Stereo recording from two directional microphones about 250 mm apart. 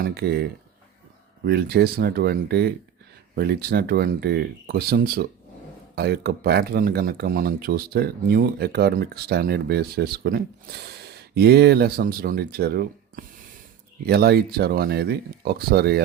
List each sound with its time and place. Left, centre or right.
0.0 s speech: right
1.5 s speech: right